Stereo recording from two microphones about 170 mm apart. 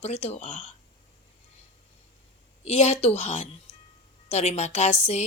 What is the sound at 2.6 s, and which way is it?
A woman's voice, 40° left (ahead or behind).